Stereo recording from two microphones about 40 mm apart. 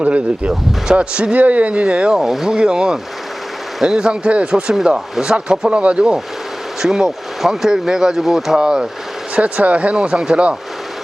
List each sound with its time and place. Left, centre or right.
0.0 s speech: right
2.1 s speech: centre; by 6.1 s right
6.8 s speech: centre
8.5 s speech: centre
9.3 s speech: right